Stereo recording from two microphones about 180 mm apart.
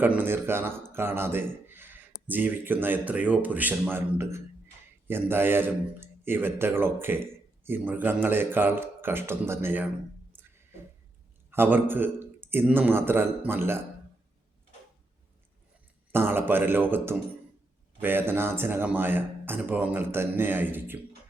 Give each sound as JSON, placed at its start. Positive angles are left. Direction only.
{"t": 0.0, "sound": "speech", "side_deg": -10}
{"t": 11.5, "sound": "speech", "side_deg": -10}
{"t": 16.1, "sound": "speech", "side_deg": -10}